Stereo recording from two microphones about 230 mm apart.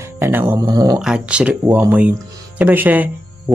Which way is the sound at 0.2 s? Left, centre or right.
Centre.